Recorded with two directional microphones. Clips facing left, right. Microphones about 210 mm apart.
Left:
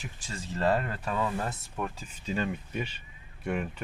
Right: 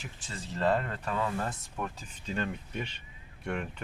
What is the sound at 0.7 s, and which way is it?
Speech, 10° left (ahead or behind).